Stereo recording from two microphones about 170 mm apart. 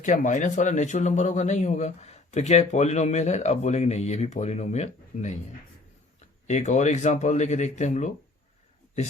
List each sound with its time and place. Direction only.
0.0 s speech: 45° left (ahead or behind)
6.5 s speech: 40° left (ahead or behind)